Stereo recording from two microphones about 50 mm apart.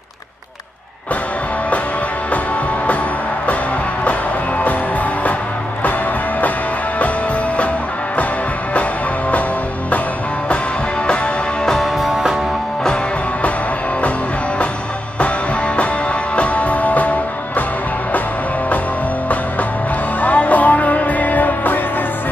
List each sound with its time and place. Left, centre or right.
11.6 s music: centre
12.0 s music: centre
15.1 s music: left
20.2 s music: left